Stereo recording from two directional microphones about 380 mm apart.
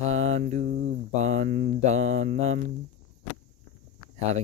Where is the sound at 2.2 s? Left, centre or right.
Centre.